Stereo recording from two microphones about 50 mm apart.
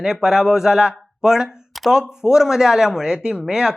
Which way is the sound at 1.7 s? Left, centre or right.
Centre.